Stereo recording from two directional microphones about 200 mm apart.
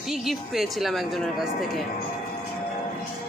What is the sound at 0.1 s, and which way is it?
A man's voice, centre (ahead or behind).